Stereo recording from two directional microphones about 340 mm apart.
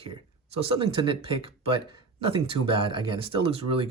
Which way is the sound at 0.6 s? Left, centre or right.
Centre.